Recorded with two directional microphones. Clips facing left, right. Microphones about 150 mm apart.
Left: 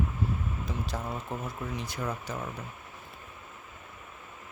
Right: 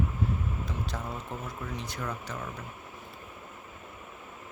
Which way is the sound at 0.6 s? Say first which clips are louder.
Left 1 dB; 5° left (ahead or behind).